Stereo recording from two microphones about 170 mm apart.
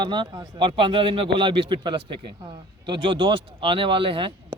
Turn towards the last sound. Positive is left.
turn(degrees=-30)  # may be behind; listen again after turning